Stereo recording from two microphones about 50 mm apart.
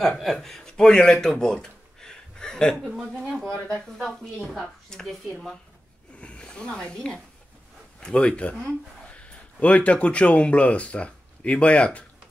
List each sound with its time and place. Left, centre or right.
0.2 s speech: centre
4.0 s a woman's voice: centre
6.2 s speech: left